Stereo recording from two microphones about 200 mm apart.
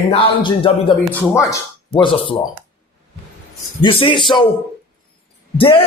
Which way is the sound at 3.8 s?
25° left (ahead or behind).